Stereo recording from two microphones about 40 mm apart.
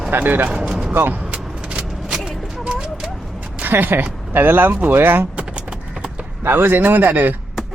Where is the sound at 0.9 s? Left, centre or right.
Right.